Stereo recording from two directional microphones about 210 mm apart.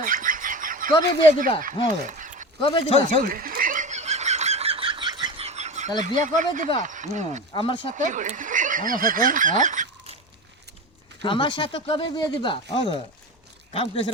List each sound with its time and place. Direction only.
0.0 s bird: 40° right (ahead or behind)
1.6 s speech: 35° right (ahead or behind)
2.6 s speech: 25° left (ahead or behind)
3.1 s a sound: 40° right (ahead or behind)
6.0 s speech: 35° right (ahead or behind)
7.5 s speech: 25° left (ahead or behind)
7.9 s speech: 35° right (ahead or behind)
11.2 s speech: 25° left (ahead or behind)